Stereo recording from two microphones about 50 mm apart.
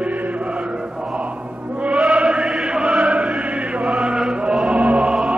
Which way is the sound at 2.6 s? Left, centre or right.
Centre.